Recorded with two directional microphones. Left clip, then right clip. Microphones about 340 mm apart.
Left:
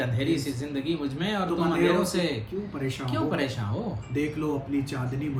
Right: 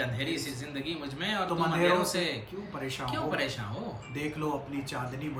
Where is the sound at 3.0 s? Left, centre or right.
Centre.